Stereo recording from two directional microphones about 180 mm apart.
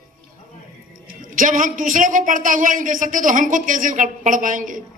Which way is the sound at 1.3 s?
45° right (ahead or behind).